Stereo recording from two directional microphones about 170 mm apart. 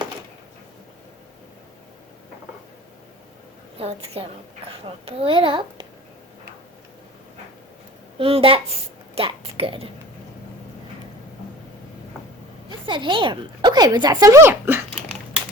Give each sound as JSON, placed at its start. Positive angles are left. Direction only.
{"t": 3.8, "sound": "a child's voice", "side_deg": -35}
{"t": 8.2, "sound": "a child's voice", "side_deg": -30}
{"t": 12.8, "sound": "speech", "side_deg": -30}